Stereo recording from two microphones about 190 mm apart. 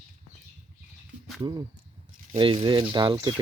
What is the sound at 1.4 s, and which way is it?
Speech, 20° right (ahead or behind).